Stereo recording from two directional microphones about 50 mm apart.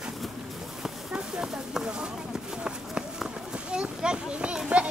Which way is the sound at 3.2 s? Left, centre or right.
Centre.